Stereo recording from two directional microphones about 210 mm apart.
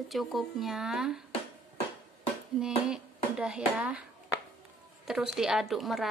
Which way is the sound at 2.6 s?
5° right (ahead or behind).